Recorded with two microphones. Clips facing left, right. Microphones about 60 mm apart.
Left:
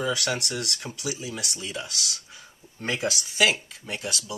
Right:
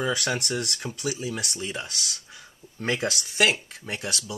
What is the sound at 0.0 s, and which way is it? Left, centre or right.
Speech, right.